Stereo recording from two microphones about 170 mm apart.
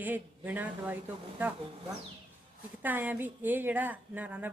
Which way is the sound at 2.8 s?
10° right (ahead or behind).